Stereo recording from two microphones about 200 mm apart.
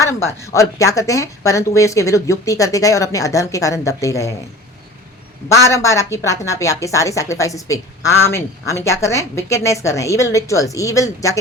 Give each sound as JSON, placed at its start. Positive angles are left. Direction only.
{"t": 0.0, "sound": "a woman's voice", "side_deg": 15}
{"t": 5.5, "sound": "a woman's voice", "side_deg": 15}